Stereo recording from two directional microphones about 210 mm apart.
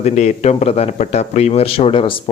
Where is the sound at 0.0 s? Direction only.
30° left (ahead or behind).